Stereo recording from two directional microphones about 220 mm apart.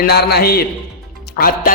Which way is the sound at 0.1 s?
45° left (ahead or behind).